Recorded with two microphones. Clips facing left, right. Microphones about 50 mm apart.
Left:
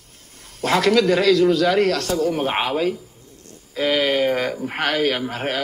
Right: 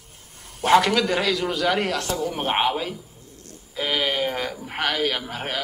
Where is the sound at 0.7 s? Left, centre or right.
Centre.